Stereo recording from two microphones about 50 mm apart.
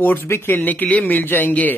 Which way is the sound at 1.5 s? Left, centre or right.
Left.